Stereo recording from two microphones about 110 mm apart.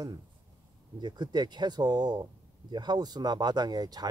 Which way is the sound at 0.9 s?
40° right (ahead or behind).